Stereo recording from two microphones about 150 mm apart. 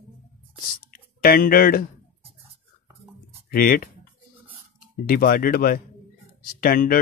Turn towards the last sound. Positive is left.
turn(degrees=70)  # may be behind; listen again after turning